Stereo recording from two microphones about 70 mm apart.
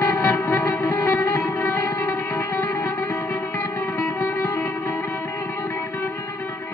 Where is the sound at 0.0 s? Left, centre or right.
Left.